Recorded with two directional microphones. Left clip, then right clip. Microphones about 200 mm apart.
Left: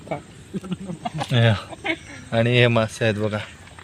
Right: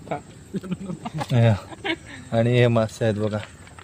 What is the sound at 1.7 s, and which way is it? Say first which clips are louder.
Speech: left 1 dB; 35° left (ahead or behind).